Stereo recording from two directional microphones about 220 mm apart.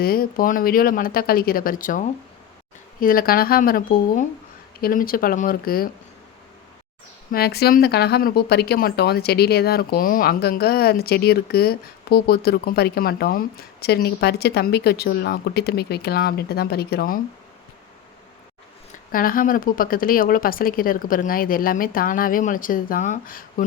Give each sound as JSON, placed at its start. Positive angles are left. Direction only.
{"t": 0.0, "sound": "speech", "side_deg": 40}
{"t": 7.3, "sound": "speech", "side_deg": 45}
{"t": 19.1, "sound": "speech", "side_deg": 40}